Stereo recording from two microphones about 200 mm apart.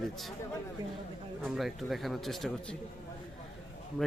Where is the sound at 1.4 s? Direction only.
Centre (ahead or behind).